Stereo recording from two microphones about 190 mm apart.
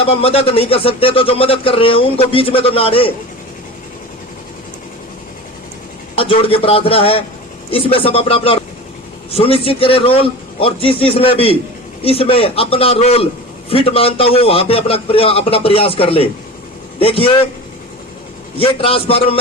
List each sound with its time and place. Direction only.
0.0 s speech: 30° left (ahead or behind)
6.1 s a man's voice: 30° left (ahead or behind)
18.6 s speech: 30° left (ahead or behind)